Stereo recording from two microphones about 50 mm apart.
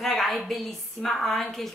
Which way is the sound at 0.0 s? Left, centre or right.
Centre.